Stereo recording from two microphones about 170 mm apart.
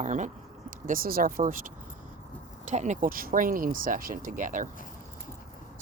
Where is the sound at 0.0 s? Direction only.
45° right (ahead or behind).